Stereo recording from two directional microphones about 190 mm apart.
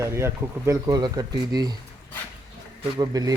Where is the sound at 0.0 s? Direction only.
15° right (ahead or behind).